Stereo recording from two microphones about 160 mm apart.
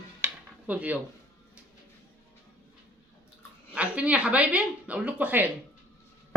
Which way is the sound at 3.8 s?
10° right (ahead or behind).